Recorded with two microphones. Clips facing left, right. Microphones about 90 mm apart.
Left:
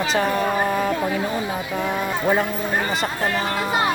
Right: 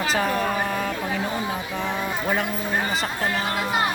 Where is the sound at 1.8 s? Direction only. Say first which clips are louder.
Left 5 dB; 10° left (ahead or behind).